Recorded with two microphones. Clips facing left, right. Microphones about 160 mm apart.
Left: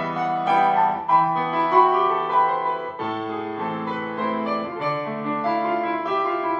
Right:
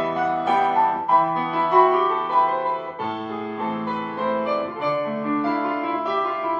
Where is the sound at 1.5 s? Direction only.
Centre (ahead or behind).